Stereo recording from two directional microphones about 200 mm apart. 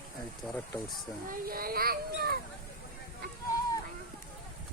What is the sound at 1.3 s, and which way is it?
Speech, 45° right (ahead or behind).